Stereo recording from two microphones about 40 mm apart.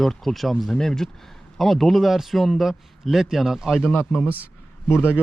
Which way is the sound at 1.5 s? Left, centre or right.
Centre.